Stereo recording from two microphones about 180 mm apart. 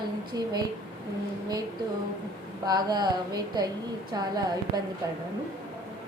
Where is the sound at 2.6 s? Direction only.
25° right (ahead or behind).